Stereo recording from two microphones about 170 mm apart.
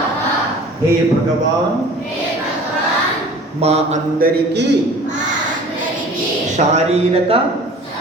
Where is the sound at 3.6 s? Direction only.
40° right (ahead or behind).